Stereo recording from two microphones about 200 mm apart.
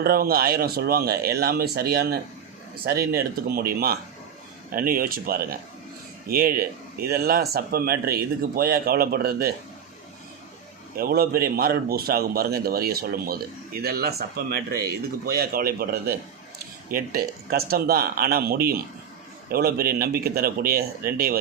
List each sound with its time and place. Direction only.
0.0 s speech: 50° right (ahead or behind)
10.9 s speech: 50° right (ahead or behind)